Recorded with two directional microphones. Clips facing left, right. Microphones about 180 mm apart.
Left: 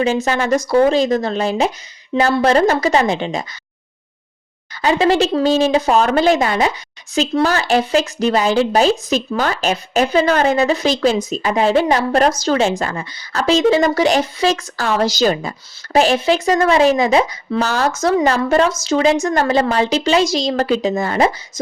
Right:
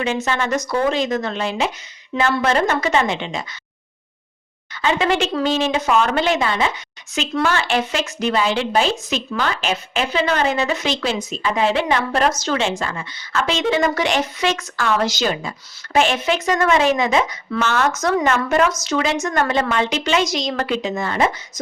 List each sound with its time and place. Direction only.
0.3 s a woman's voice: 35° left (ahead or behind)
4.7 s a woman's voice: 35° left (ahead or behind)